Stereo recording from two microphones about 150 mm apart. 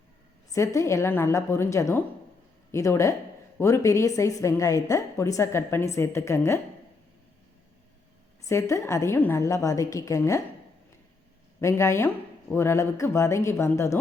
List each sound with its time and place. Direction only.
0.5 s a woman's voice: 20° left (ahead or behind)
8.4 s speech: 20° left (ahead or behind)
11.6 s speech: 20° left (ahead or behind)